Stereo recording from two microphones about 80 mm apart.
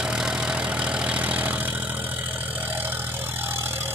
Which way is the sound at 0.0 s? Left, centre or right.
Centre.